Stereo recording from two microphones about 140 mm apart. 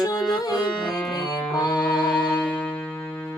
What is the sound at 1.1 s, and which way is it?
Music, 30° left (ahead or behind).